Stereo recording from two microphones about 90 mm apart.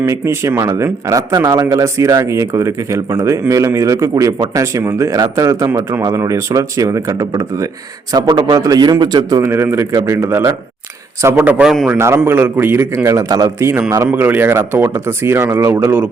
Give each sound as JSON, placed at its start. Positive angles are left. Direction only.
{"t": 0.0, "sound": "speech", "side_deg": -30}
{"t": 8.1, "sound": "a man's voice", "side_deg": -50}
{"t": 9.4, "sound": "speech", "side_deg": -30}
{"t": 11.6, "sound": "a man's voice", "side_deg": -5}
{"t": 11.9, "sound": "a man's voice", "side_deg": -30}
{"t": 14.1, "sound": "a man's voice", "side_deg": -20}